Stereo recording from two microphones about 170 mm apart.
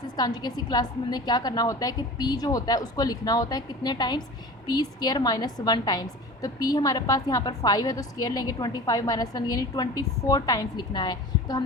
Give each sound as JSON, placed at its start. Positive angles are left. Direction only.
{"t": 0.2, "sound": "a woman's voice", "side_deg": 25}